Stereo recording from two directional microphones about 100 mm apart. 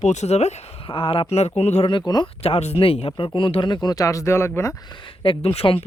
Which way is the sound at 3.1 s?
55° left (ahead or behind).